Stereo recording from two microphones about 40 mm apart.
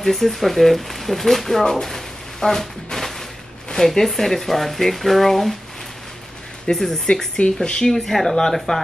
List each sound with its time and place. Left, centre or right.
0.0 s speech: centre
6.7 s speech: centre
7.9 s speech: centre